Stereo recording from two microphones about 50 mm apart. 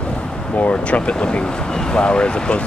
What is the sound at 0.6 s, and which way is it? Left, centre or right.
Speech, left.